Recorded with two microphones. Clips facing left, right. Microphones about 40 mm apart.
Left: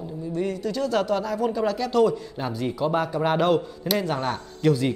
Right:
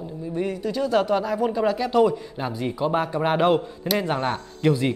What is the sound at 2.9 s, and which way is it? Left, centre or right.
Speech, right.